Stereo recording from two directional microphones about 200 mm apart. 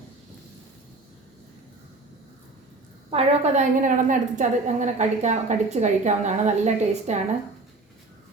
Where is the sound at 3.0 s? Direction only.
30° right (ahead or behind).